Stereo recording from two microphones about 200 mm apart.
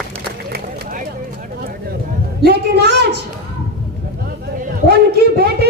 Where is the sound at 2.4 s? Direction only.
55° right (ahead or behind).